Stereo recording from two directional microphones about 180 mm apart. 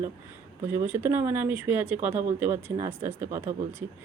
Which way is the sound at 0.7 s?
10° right (ahead or behind).